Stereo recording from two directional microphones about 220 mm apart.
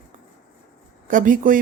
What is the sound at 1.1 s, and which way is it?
Speech, 35° right (ahead or behind).